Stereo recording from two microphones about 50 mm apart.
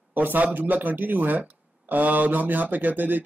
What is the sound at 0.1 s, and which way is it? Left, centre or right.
Speech, right.